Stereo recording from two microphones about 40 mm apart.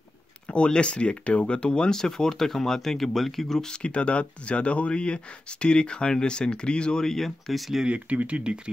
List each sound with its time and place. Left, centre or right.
0.5 s speech: left
1.9 s speech: centre
3.7 s speech: left
7.1 s speech: centre
7.8 s speech: right